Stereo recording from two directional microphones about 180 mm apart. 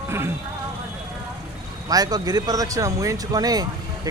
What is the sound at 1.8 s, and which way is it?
Speech, 20° right (ahead or behind).